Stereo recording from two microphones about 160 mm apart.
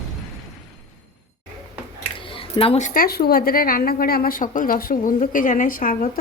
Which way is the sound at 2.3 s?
35° left (ahead or behind).